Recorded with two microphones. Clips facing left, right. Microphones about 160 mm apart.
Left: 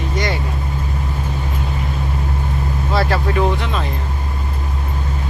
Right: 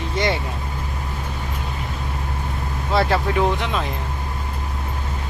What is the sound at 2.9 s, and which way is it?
Speech, 20° right (ahead or behind).